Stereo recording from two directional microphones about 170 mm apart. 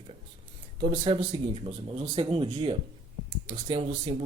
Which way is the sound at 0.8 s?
30° right (ahead or behind).